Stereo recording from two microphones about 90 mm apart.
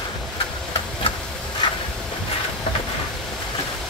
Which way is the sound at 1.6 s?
60° left (ahead or behind).